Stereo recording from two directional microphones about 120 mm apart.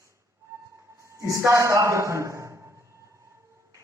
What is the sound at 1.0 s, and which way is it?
A man's voice, 25° right (ahead or behind).